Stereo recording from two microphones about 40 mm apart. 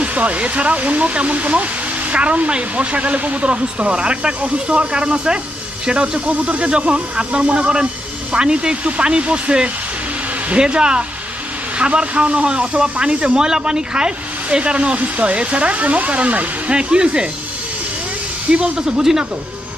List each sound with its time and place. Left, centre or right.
0.0 s speech: right
18.5 s speech: right